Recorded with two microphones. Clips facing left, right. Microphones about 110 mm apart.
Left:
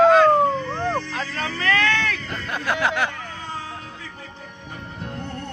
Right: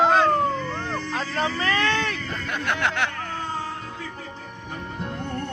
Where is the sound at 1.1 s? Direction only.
25° right (ahead or behind).